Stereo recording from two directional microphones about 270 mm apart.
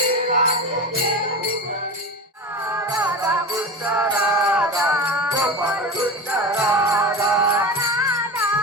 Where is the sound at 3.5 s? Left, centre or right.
Centre.